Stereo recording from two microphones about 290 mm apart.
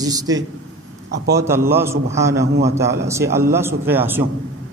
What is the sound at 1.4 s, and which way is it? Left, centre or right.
A man's voice, centre.